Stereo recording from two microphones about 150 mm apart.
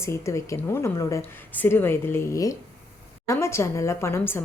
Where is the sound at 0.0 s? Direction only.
20° left (ahead or behind).